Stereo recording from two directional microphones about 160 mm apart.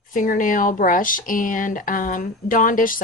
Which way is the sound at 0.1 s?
55° left (ahead or behind).